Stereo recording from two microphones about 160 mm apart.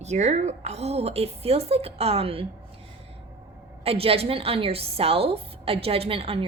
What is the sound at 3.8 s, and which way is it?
Speech, 35° right (ahead or behind).